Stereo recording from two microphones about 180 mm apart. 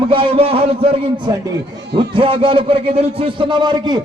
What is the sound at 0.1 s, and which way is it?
A man's voice, 30° right (ahead or behind).